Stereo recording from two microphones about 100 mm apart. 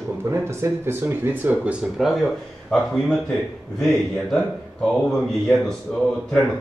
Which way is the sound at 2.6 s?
5° left (ahead or behind).